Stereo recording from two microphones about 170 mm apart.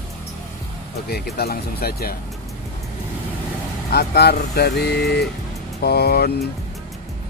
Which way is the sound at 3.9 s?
70° left (ahead or behind).